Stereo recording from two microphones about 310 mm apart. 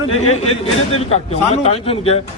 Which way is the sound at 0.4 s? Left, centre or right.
Centre.